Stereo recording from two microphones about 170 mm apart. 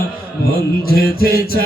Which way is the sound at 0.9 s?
60° left (ahead or behind).